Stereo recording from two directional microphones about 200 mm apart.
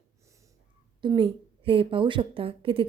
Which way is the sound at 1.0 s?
25° right (ahead or behind).